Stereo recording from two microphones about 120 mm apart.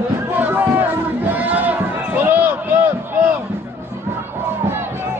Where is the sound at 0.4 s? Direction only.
15° right (ahead or behind).